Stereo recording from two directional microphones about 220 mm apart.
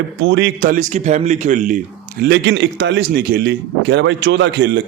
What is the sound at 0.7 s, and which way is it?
A man's voice, 35° right (ahead or behind).